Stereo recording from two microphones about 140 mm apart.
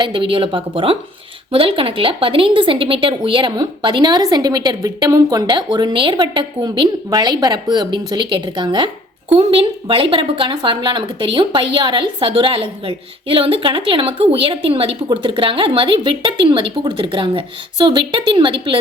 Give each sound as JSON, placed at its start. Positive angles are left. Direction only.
{"t": 0.0, "sound": "a woman's voice", "side_deg": -35}